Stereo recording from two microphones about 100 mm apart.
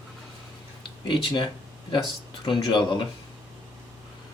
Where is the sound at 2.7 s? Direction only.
50° left (ahead or behind).